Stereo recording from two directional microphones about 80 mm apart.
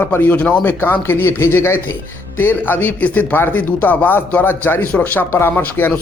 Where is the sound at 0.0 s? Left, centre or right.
Left.